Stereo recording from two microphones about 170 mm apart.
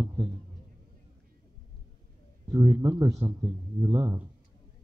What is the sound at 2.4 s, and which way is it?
A man's voice, 15° right (ahead or behind).